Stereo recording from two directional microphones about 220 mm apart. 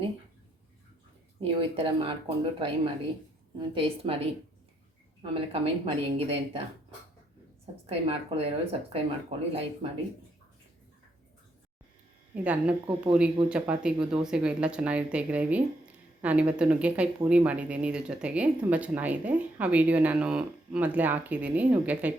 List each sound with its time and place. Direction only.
1.4 s speech: 25° right (ahead or behind)
5.2 s speech: 25° right (ahead or behind)
7.9 s speech: 25° right (ahead or behind)
12.3 s speech: 5° right (ahead or behind)